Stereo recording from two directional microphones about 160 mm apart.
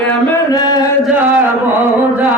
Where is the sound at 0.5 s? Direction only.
25° left (ahead or behind).